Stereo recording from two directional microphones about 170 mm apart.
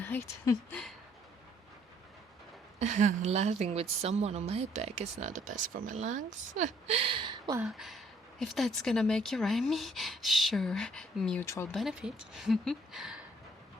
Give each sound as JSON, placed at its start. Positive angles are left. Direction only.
{"t": 0.0, "sound": "speech", "side_deg": 15}
{"t": 2.7, "sound": "a woman's voice", "side_deg": -40}
{"t": 7.6, "sound": "speech", "side_deg": 0}
{"t": 11.4, "sound": "speech", "side_deg": 15}
{"t": 11.7, "sound": "speech", "side_deg": 0}